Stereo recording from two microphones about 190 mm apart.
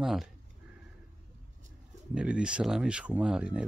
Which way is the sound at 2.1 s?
5° right (ahead or behind).